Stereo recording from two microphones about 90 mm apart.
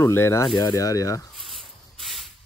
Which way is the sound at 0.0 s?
25° left (ahead or behind).